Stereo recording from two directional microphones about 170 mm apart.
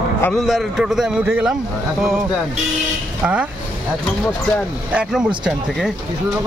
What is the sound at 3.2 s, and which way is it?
Speech, 5° right (ahead or behind).